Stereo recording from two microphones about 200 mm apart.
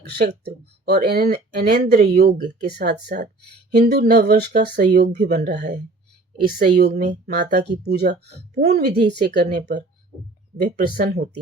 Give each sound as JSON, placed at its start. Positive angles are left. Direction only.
{"t": 0.1, "sound": "speech", "side_deg": -55}
{"t": 8.6, "sound": "speech", "side_deg": -35}
{"t": 9.0, "sound": "speech", "side_deg": -50}